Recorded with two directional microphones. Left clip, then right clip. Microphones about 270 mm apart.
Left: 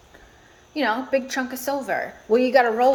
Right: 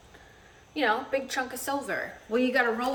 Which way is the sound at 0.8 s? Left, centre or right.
Centre.